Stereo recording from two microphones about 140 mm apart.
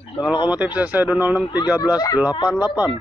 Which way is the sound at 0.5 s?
10° right (ahead or behind).